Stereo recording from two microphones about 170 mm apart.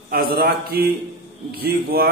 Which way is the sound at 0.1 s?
60° right (ahead or behind).